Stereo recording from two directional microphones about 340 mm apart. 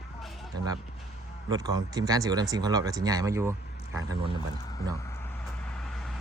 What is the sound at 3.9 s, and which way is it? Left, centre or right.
Speech, right.